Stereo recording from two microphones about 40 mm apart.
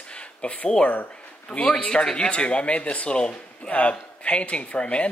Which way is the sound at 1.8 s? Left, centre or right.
Left.